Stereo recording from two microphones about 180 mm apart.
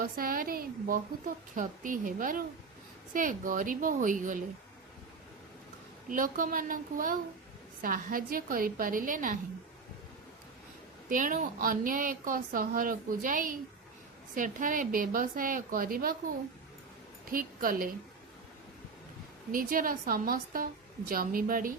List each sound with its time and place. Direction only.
0.0 s speech: 55° right (ahead or behind)
6.1 s speech: 50° right (ahead or behind)
11.1 s speech: 50° right (ahead or behind)
17.3 s speech: 55° right (ahead or behind)
19.5 s speech: 50° right (ahead or behind)